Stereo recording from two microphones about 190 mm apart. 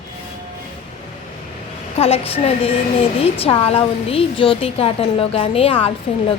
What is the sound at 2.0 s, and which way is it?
A woman's voice, 30° left (ahead or behind).